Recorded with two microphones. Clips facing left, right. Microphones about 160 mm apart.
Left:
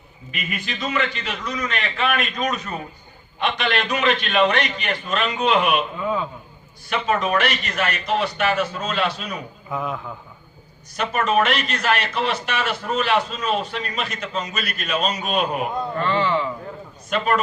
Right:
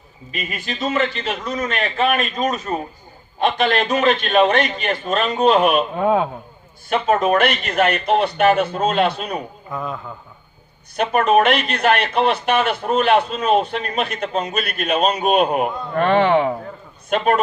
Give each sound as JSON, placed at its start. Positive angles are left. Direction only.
{"t": 0.3, "sound": "a man's voice", "side_deg": -40}
{"t": 6.0, "sound": "speech", "side_deg": -60}
{"t": 6.9, "sound": "speech", "side_deg": -45}
{"t": 9.7, "sound": "a man's voice", "side_deg": 5}
{"t": 10.9, "sound": "a man's voice", "side_deg": -55}